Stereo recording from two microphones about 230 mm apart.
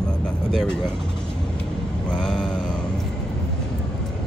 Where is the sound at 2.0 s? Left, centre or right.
Centre.